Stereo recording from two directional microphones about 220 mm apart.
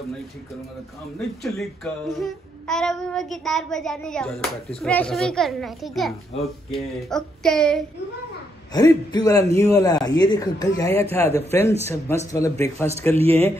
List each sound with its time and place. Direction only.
1.1 s speech: centre (ahead or behind)
8.7 s speech: 15° left (ahead or behind)